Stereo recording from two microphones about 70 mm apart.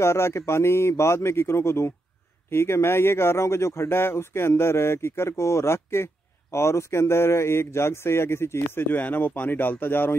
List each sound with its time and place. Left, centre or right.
0.0 s speech: left